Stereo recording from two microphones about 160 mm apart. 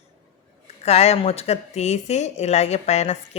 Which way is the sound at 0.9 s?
40° left (ahead or behind).